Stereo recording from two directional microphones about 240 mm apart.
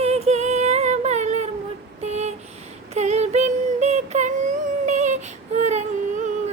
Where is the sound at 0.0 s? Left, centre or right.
Right.